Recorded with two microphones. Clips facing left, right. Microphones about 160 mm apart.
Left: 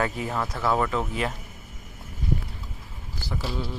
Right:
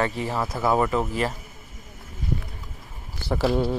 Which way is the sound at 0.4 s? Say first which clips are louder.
Right 3 dB; 10° right (ahead or behind).